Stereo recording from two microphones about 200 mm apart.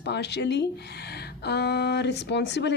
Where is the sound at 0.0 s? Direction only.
60° left (ahead or behind).